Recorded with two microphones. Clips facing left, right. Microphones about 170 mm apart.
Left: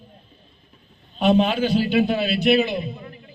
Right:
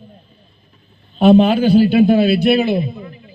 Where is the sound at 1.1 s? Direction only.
35° right (ahead or behind).